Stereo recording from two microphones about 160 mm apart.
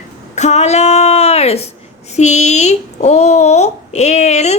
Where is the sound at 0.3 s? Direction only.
45° left (ahead or behind).